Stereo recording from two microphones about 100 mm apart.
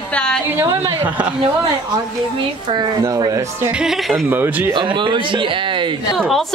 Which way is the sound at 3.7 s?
5° right (ahead or behind).